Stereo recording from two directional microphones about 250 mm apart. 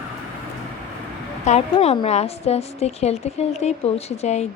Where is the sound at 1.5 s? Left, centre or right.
Left.